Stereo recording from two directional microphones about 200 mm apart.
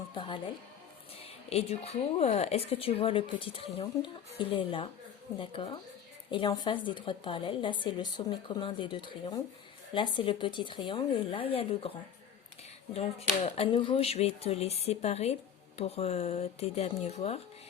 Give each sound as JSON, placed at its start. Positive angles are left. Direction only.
{"t": 0.1, "sound": "a woman's voice", "side_deg": 25}
{"t": 1.5, "sound": "a woman's voice", "side_deg": 30}
{"t": 12.9, "sound": "speech", "side_deg": 30}